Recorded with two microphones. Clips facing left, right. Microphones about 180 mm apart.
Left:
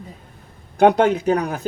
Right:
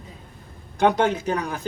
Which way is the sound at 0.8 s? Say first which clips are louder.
Left 5 dB; 55° left (ahead or behind).